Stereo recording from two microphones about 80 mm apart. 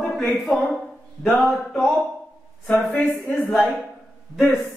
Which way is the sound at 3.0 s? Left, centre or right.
Centre.